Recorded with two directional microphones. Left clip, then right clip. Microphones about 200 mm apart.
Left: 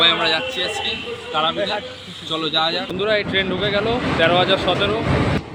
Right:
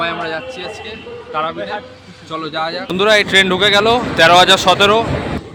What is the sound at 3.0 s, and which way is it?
Speech, 30° right (ahead or behind).